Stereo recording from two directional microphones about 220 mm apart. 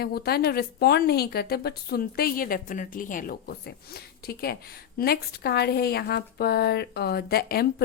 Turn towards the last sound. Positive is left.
turn(degrees=45)  # may be behind; listen again after turning